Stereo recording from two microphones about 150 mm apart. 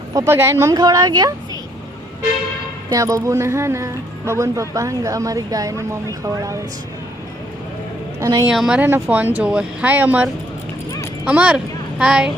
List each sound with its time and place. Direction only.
0.3 s speech: 15° right (ahead or behind)
2.9 s speech: 20° right (ahead or behind)
8.2 s speech: 20° right (ahead or behind)
8.4 s speech: 5° right (ahead or behind)
11.3 s a woman's voice: 10° right (ahead or behind)